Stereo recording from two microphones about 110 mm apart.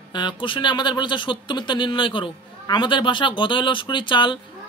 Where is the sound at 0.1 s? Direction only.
45° left (ahead or behind).